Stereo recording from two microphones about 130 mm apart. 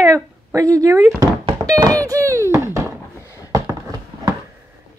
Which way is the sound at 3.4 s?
20° right (ahead or behind).